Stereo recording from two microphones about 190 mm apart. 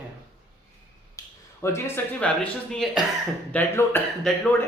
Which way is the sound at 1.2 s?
20° left (ahead or behind).